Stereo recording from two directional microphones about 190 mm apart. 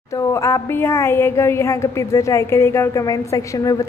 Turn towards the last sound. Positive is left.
turn(degrees=15)  # may be behind; listen again after turning